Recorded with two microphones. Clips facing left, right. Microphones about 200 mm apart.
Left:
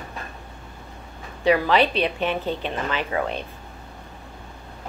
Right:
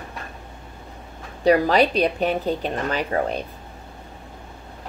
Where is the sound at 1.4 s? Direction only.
40° right (ahead or behind).